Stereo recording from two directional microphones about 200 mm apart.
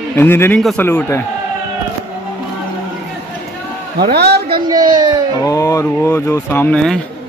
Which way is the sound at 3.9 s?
55° right (ahead or behind).